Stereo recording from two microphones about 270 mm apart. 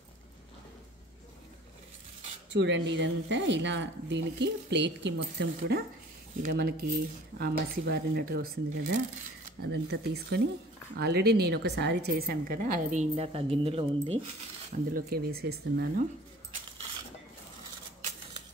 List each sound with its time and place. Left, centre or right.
2.5 s a woman's voice: right
14.9 s a woman's voice: right